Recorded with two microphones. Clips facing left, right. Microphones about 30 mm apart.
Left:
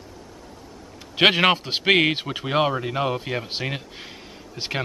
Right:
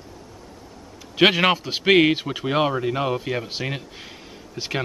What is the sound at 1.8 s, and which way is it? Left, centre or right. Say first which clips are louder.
Speech: right 3 dB; centre.